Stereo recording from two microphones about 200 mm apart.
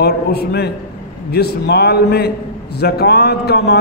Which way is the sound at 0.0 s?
55° left (ahead or behind).